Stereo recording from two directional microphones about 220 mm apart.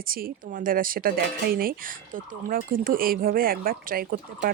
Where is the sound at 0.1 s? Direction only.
40° right (ahead or behind).